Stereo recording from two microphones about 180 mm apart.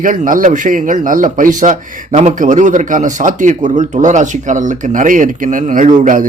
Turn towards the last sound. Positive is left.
turn(degrees=-45)  # may be behind; listen again after turning